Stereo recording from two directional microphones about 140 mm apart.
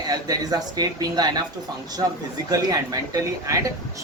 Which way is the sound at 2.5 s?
25° right (ahead or behind).